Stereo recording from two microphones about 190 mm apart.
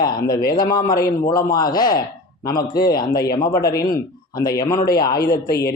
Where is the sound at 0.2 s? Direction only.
50° left (ahead or behind).